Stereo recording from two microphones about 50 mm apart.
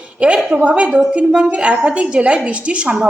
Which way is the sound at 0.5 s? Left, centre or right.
Right.